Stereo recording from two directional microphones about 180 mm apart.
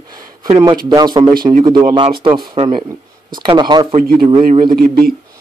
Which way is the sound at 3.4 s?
25° right (ahead or behind).